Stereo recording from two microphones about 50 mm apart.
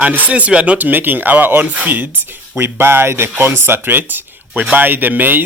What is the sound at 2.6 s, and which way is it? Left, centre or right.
Speech, right.